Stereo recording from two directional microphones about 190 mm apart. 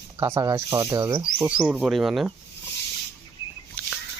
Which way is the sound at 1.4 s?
5° right (ahead or behind).